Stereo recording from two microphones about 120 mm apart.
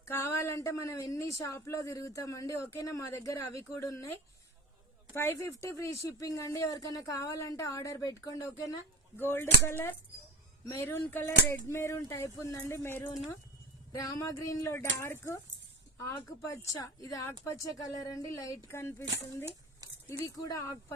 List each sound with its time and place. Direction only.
0.0 s speech: 20° left (ahead or behind)
5.1 s speech: 20° left (ahead or behind)